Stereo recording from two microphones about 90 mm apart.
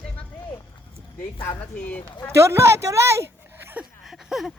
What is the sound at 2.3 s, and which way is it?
Speech, 30° right (ahead or behind).